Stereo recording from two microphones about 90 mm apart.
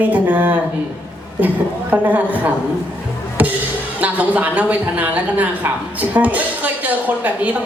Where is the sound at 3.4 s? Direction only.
20° right (ahead or behind).